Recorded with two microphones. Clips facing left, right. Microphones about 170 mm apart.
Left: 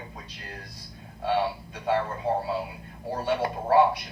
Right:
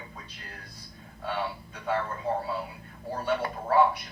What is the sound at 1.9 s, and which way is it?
Speech, 35° left (ahead or behind).